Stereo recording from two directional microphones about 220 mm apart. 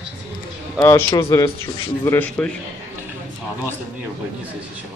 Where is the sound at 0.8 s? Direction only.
10° left (ahead or behind).